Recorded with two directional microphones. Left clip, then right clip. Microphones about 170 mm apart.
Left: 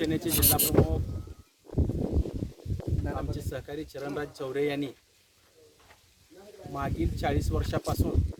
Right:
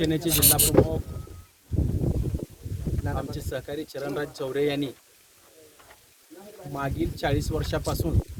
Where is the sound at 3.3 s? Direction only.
Centre (ahead or behind).